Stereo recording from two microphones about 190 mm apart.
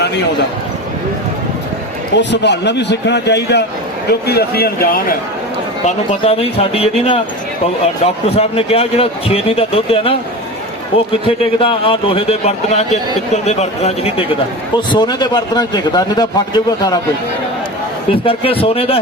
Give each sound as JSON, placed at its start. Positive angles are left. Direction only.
{"t": 2.1, "sound": "a man's voice", "side_deg": 65}
{"t": 5.8, "sound": "a man's voice", "side_deg": 30}
{"t": 18.1, "sound": "a man's voice", "side_deg": 30}